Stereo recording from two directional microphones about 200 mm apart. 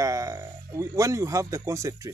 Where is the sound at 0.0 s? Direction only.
15° right (ahead or behind).